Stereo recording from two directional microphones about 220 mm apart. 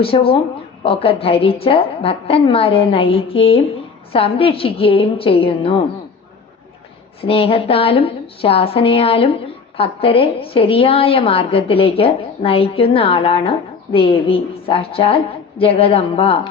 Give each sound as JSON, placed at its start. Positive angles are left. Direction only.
{"t": 0.0, "sound": "a woman's voice", "side_deg": 25}
{"t": 7.2, "sound": "a woman's voice", "side_deg": 25}